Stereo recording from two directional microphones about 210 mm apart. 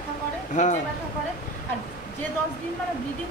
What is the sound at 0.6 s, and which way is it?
Speech, 35° left (ahead or behind).